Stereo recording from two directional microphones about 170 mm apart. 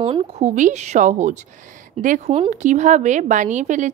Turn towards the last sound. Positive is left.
turn(degrees=-45)  # may be behind; listen again after turning